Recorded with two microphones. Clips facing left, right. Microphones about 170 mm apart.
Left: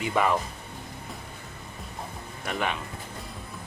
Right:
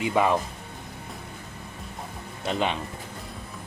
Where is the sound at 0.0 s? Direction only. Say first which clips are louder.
Right 2 dB; 20° right (ahead or behind).